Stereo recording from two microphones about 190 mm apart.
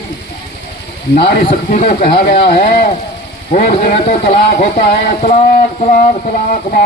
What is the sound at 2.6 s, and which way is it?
Speech, 50° left (ahead or behind).